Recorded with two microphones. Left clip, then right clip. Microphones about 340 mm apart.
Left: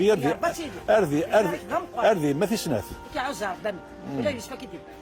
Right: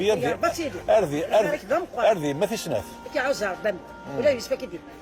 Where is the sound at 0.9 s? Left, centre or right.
Left.